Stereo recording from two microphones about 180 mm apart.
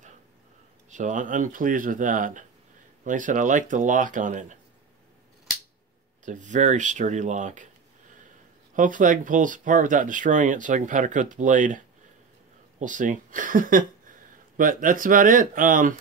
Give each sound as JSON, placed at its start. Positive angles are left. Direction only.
{"t": 0.8, "sound": "speech", "side_deg": -45}
{"t": 6.2, "sound": "speech", "side_deg": -45}
{"t": 8.7, "sound": "speech", "side_deg": -45}